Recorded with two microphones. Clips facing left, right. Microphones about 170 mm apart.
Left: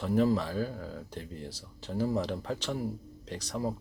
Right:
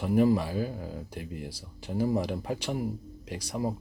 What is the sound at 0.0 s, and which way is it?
Speech, 10° right (ahead or behind).